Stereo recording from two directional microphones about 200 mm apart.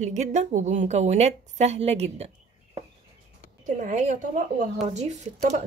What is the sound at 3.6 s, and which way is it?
Speech, 40° right (ahead or behind).